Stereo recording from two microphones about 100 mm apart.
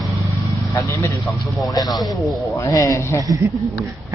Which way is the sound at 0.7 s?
30° left (ahead or behind).